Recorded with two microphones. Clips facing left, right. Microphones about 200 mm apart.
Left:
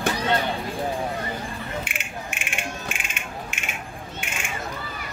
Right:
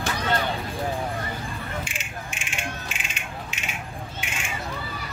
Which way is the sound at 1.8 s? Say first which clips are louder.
Left 1 dB; 60° left (ahead or behind).